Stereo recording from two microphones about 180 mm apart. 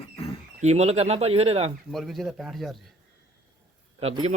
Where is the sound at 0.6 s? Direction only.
35° right (ahead or behind).